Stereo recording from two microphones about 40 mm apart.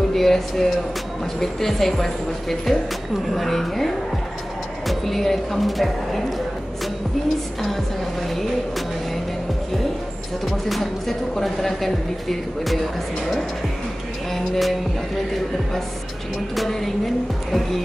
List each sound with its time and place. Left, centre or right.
0.1 s music: centre
1.4 s speech: centre
7.6 s music: centre
10.4 s speech: centre
14.3 s music: centre
16.5 s speech: centre